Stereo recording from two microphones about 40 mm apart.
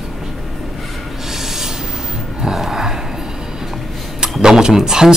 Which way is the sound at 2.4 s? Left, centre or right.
Centre.